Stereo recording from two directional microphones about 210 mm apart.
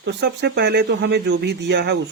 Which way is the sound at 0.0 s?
55° right (ahead or behind).